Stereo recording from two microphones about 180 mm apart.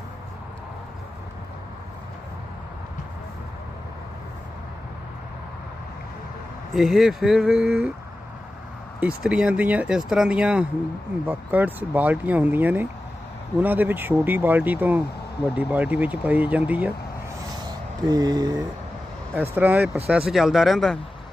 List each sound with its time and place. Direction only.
6.7 s speech: centre (ahead or behind)
9.0 s speech: 5° right (ahead or behind)
18.1 s a sound: 20° right (ahead or behind)
19.5 s speech: 10° right (ahead or behind)